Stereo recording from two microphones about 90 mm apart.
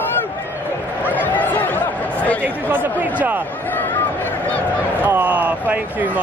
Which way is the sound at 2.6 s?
20° right (ahead or behind).